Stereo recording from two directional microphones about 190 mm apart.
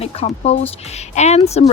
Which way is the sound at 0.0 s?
30° left (ahead or behind).